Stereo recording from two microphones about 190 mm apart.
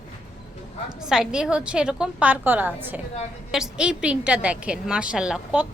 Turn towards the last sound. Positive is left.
turn(degrees=-5)  # may be behind; listen again after turning